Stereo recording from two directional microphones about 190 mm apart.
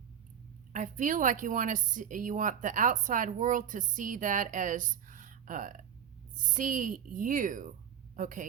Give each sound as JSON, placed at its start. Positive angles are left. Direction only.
{"t": 0.7, "sound": "speech", "side_deg": -40}